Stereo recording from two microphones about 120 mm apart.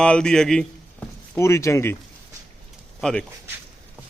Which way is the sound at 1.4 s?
25° left (ahead or behind).